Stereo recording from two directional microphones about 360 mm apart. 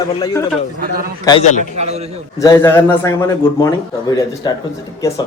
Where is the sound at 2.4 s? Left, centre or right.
Centre.